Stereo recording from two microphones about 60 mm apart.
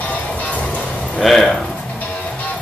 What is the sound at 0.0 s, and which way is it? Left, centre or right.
Music, left.